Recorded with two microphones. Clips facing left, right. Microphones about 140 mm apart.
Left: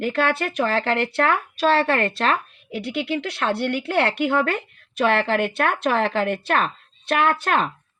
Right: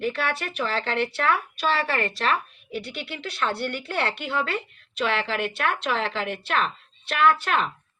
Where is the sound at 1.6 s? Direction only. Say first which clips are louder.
Left 6 dB; 40° left (ahead or behind).